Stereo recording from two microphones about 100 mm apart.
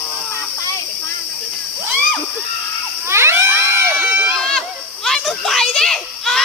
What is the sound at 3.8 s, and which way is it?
Crowd, 20° right (ahead or behind).